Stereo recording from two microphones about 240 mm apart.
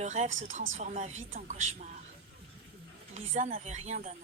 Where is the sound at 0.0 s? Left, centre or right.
Right.